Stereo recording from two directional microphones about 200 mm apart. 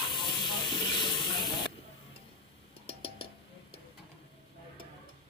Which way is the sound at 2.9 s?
25° left (ahead or behind).